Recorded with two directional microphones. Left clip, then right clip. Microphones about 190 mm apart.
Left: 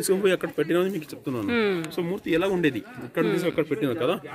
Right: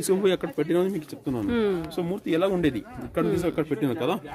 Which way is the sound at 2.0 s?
60° right (ahead or behind).